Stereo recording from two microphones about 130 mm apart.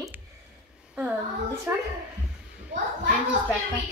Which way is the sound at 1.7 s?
20° right (ahead or behind).